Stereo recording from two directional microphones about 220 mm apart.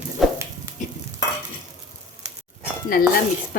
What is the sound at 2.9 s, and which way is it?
Speech, 40° left (ahead or behind).